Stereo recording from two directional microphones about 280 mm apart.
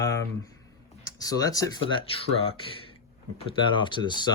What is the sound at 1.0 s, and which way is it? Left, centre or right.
Speech, centre.